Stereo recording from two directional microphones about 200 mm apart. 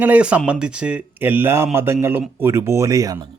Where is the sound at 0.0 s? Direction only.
5° right (ahead or behind).